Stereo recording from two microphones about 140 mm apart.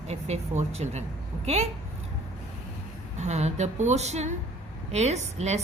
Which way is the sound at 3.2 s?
55° right (ahead or behind).